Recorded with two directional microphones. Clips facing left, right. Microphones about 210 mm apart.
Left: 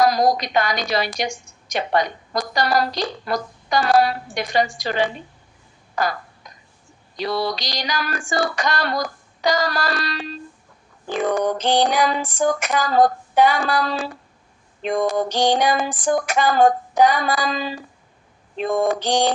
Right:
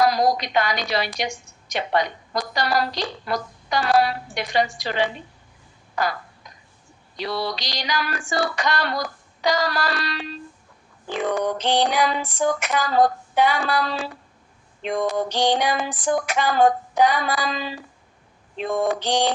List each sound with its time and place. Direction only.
0.0 s a woman's voice: 45° left (ahead or behind)
7.2 s a woman's voice: 45° left (ahead or behind)